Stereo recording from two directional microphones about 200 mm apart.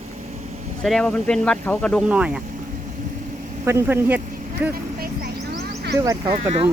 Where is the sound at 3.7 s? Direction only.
10° right (ahead or behind).